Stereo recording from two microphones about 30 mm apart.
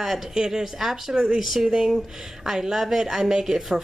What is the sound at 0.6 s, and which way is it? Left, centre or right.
A woman's voice, centre.